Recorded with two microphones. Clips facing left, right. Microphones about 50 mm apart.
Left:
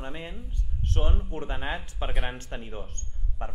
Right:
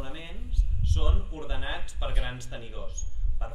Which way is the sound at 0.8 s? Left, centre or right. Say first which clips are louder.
Left 3 dB; left.